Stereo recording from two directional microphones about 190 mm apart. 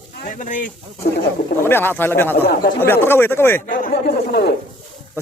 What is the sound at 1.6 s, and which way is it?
Speech, 10° left (ahead or behind).